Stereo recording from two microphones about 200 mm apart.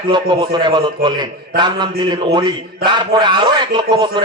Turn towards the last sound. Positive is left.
turn(degrees=-20)  # may be behind; listen again after turning